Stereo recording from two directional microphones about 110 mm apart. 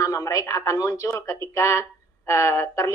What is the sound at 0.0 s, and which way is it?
Speech, 30° left (ahead or behind).